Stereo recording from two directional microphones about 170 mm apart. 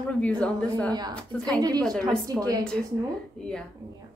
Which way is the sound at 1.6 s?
20° right (ahead or behind).